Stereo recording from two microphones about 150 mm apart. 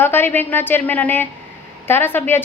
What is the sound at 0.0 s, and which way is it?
A woman's voice, 15° left (ahead or behind).